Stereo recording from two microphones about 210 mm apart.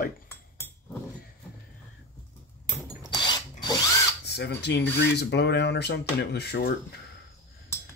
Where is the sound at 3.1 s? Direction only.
20° left (ahead or behind).